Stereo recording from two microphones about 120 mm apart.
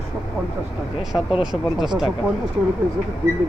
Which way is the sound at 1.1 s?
30° left (ahead or behind).